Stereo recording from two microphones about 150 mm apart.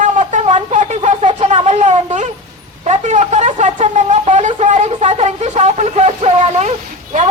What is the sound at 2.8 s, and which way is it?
Speech, 50° right (ahead or behind).